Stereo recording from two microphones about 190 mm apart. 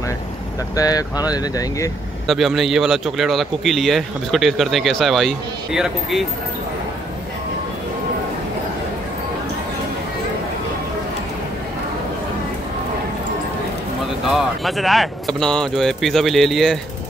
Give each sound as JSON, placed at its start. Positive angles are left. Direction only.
{"t": 0.7, "sound": "speech", "side_deg": 20}
{"t": 2.2, "sound": "speech", "side_deg": 0}
{"t": 14.3, "sound": "speech", "side_deg": 0}